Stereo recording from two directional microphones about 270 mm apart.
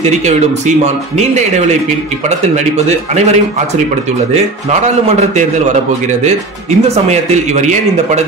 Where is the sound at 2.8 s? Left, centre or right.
Right.